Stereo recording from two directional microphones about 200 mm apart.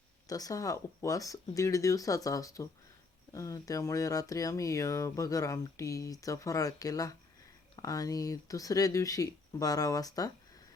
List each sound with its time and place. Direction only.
0.3 s speech: 20° left (ahead or behind)